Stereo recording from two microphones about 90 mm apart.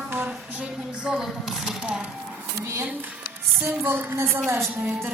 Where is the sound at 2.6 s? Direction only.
30° right (ahead or behind).